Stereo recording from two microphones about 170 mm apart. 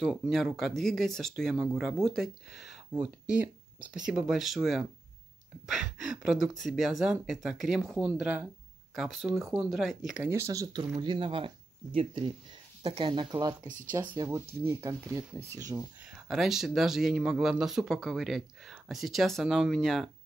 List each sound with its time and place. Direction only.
0.0 s speech: centre (ahead or behind); by 15.8 s 20° right (ahead or behind)
16.3 s speech: centre (ahead or behind)